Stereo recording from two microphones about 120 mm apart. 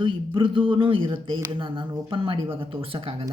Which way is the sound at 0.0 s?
45° right (ahead or behind).